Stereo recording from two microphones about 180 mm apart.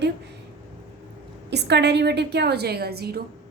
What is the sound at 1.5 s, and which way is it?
A woman's voice, 70° right (ahead or behind).